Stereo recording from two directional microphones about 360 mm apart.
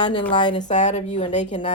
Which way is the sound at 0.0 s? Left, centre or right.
Centre.